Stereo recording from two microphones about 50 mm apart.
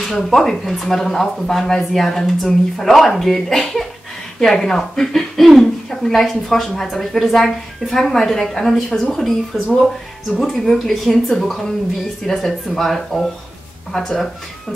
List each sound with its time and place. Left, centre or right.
0.0 s a woman's voice: centre